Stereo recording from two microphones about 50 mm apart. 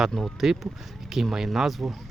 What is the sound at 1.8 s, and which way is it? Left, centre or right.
Speech, right.